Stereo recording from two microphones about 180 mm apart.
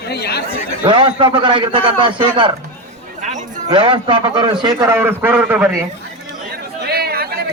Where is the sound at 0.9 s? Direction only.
30° right (ahead or behind).